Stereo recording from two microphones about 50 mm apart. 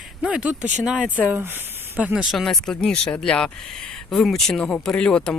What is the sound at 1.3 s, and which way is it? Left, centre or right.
Speech, right.